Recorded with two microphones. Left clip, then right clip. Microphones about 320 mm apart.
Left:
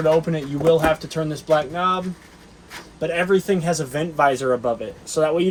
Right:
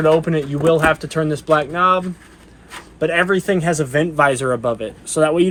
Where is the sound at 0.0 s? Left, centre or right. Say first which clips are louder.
Right 4 dB; right.